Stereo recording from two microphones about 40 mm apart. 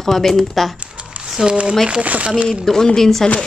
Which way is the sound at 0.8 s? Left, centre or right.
Right.